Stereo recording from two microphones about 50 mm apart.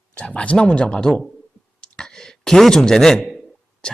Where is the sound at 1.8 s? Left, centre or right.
Centre.